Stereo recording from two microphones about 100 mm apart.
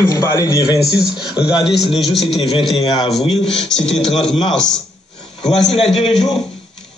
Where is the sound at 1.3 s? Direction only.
10° right (ahead or behind).